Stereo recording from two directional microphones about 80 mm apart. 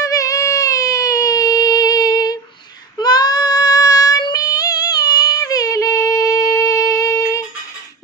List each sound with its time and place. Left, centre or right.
0.0 s a sound: left
3.0 s child singing: left
4.2 s music: left